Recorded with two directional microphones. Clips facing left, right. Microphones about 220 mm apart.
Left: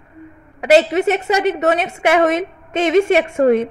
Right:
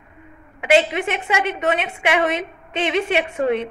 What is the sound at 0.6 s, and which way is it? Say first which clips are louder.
A woman's voice: left 5 dB; 40° left (ahead or behind).